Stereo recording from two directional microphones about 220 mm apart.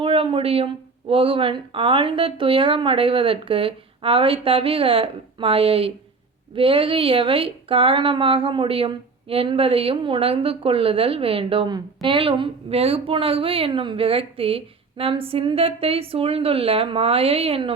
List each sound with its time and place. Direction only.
0.0 s speech: 25° right (ahead or behind)